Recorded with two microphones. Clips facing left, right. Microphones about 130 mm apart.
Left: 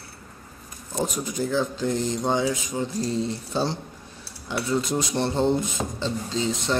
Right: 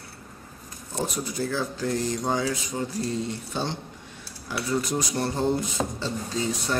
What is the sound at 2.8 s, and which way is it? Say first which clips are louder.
Mantra: left 3 dB; 30° left (ahead or behind).